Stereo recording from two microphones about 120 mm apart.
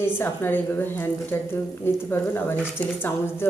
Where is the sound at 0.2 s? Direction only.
20° left (ahead or behind).